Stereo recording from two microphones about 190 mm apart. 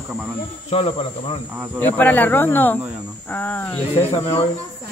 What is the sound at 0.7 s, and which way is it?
Speech, 30° left (ahead or behind).